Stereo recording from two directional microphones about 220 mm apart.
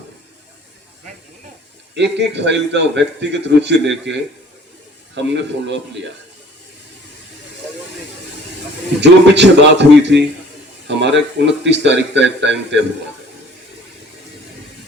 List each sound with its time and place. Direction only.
2.0 s a man's voice: 50° right (ahead or behind)
9.0 s a man's voice: 50° right (ahead or behind)